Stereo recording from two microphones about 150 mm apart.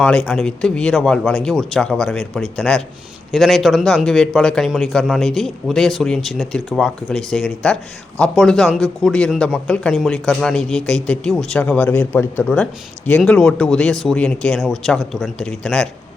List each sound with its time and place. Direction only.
0.0 s a man's voice: 5° left (ahead or behind)